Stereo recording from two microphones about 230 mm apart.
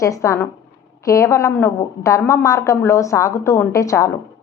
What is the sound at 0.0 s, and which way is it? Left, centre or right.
A woman's voice, centre.